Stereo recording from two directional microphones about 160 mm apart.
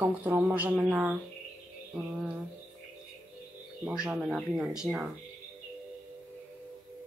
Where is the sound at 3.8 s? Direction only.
5° right (ahead or behind).